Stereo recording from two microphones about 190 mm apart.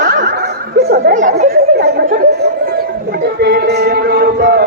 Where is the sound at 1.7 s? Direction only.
60° right (ahead or behind).